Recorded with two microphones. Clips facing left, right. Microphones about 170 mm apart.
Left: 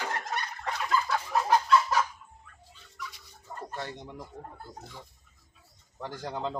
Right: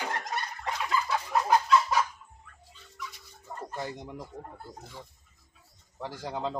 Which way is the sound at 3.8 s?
10° right (ahead or behind).